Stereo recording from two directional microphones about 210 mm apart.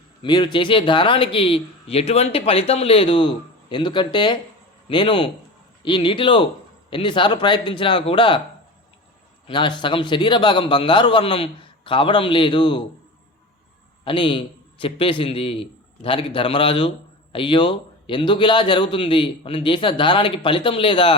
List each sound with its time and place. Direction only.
0.2 s speech: 20° left (ahead or behind)
9.5 s speech: 20° left (ahead or behind)
14.0 s a man's voice: 25° left (ahead or behind)